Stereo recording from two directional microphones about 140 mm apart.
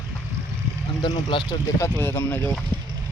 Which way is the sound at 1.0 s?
35° left (ahead or behind).